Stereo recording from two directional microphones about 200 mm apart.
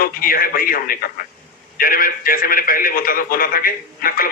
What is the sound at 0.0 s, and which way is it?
A man's voice, 45° left (ahead or behind).